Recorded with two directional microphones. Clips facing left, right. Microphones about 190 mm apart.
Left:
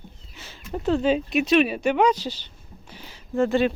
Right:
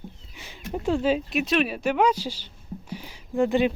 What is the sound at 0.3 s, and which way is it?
Speech, 15° right (ahead or behind).